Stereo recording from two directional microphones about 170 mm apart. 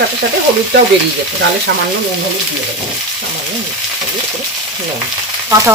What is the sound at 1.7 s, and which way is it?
Frying, 85° right.